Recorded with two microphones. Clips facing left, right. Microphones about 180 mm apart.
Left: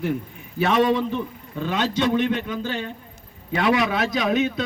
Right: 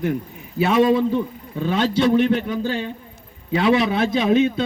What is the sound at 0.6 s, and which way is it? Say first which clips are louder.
A man's voice: right 3 dB; 10° right (ahead or behind).